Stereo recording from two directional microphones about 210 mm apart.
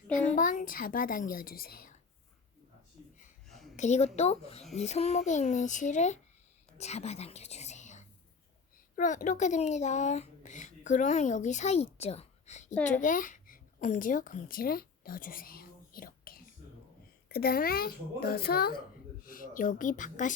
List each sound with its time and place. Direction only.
0.3 s a woman's voice: 40° left (ahead or behind)
3.8 s a woman's voice: 35° left (ahead or behind)